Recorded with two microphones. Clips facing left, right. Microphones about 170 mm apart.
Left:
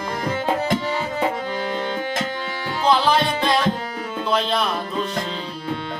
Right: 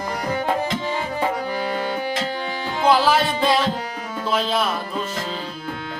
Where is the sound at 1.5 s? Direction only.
10° right (ahead or behind).